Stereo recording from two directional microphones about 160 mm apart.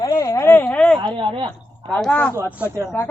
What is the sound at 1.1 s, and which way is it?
Speech, 30° right (ahead or behind).